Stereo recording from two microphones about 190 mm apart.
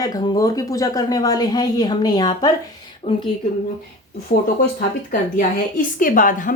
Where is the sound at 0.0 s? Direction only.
20° left (ahead or behind).